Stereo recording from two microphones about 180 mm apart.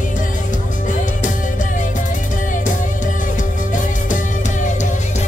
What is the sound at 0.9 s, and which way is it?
Music, 45° left (ahead or behind).